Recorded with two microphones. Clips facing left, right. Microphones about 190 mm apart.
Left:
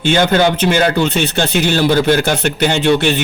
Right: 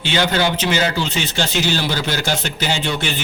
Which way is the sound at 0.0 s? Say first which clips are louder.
Left 6 dB; 50° left (ahead or behind).